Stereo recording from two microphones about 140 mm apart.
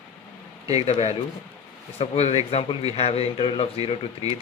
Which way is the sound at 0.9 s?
50° left (ahead or behind).